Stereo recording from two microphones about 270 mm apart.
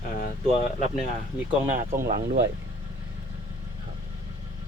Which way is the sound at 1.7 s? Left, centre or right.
Right.